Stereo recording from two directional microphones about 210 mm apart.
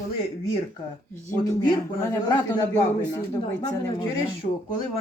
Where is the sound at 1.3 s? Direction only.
15° left (ahead or behind).